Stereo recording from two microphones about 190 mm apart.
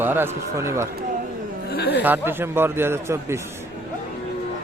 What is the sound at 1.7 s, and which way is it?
Speech, 60° left (ahead or behind).